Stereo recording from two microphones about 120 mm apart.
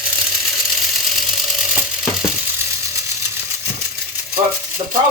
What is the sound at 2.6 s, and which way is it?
Ratchet, 25° right (ahead or behind).